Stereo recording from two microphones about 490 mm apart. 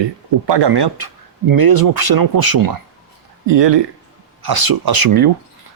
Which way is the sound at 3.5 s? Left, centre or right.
Right.